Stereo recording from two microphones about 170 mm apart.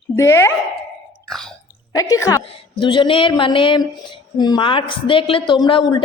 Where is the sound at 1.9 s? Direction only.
20° left (ahead or behind).